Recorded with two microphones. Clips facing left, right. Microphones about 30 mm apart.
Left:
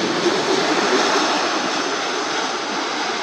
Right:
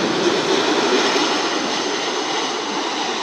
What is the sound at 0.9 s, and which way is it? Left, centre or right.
Vehicle, centre.